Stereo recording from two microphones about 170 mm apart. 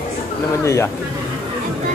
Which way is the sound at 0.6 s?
15° left (ahead or behind).